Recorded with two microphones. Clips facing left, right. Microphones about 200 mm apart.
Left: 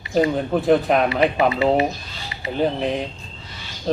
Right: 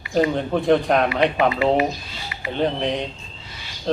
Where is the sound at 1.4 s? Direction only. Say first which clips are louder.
Left 1 dB; 25° left (ahead or behind).